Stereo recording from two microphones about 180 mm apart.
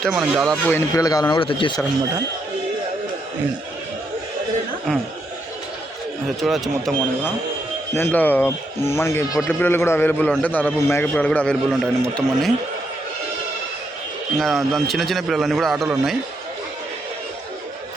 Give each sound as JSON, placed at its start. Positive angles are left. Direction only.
{"t": 0.0, "sound": "a man's voice", "side_deg": -5}
{"t": 0.7, "sound": "speech", "side_deg": 15}
{"t": 6.2, "sound": "a man's voice", "side_deg": 0}
{"t": 7.9, "sound": "speech", "side_deg": 10}
{"t": 14.3, "sound": "a man's voice", "side_deg": 0}